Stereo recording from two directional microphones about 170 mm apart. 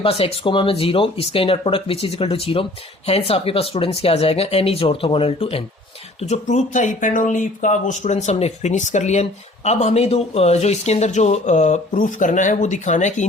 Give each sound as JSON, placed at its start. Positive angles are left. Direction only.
{"t": 0.0, "sound": "speech", "side_deg": 35}